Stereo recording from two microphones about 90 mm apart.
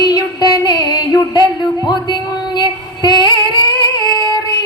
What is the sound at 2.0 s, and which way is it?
Female singing, 55° left (ahead or behind).